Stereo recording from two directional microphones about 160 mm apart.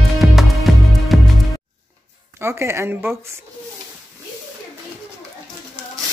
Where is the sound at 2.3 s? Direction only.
15° right (ahead or behind).